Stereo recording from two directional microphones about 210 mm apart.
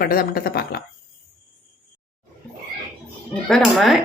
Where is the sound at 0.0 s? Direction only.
45° left (ahead or behind).